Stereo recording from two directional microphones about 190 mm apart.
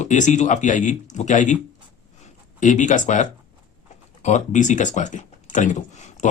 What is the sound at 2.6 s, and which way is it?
Speech, 40° left (ahead or behind).